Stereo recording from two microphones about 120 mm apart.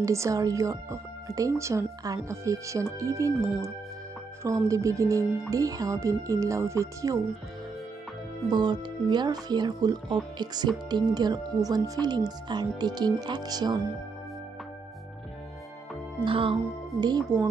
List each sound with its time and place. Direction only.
0.0 s a woman's voice: 25° right (ahead or behind)
8.5 s speech: 40° right (ahead or behind)
16.3 s speech: 45° right (ahead or behind)
17.3 s speech: 30° right (ahead or behind)